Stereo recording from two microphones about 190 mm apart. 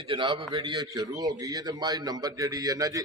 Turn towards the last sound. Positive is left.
turn(degrees=-20)  # may be behind; listen again after turning